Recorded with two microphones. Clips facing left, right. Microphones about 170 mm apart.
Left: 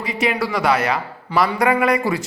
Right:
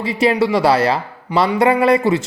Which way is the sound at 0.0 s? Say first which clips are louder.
Right 6 dB; 30° right (ahead or behind).